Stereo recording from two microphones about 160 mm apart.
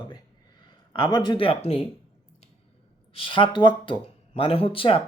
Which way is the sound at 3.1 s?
35° left (ahead or behind).